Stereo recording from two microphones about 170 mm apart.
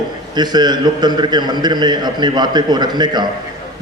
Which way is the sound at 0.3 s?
25° right (ahead or behind).